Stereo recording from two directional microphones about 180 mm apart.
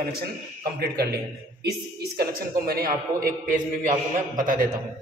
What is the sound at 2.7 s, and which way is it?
A man's voice, 55° right (ahead or behind).